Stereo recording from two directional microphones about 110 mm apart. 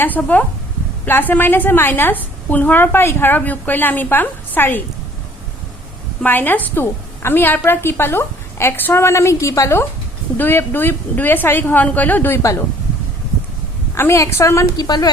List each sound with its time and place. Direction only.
0.0 s a woman's voice: 15° left (ahead or behind)
6.2 s a woman's voice: 15° left (ahead or behind)
12.4 s a woman's voice: 30° left (ahead or behind)
13.9 s a woman's voice: 25° left (ahead or behind)